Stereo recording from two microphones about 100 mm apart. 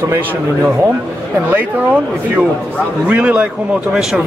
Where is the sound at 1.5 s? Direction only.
15° right (ahead or behind).